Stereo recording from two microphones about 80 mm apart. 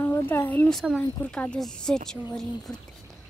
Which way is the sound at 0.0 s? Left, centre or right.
Left.